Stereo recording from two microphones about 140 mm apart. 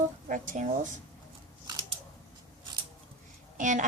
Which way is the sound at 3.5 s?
65° right (ahead or behind).